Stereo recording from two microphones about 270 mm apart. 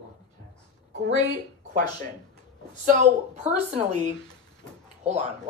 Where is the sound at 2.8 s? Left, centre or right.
Right.